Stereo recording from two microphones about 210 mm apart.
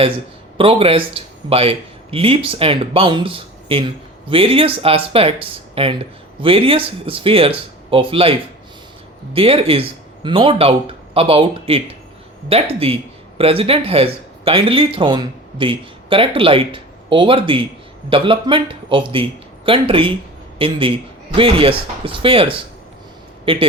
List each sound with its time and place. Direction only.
0.5 s speech: 25° right (ahead or behind)